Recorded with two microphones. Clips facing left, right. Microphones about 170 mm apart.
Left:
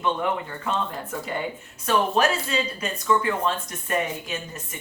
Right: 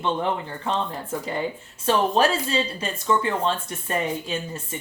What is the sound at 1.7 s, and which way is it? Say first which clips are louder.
Speech: right 2 dB; 30° right (ahead or behind).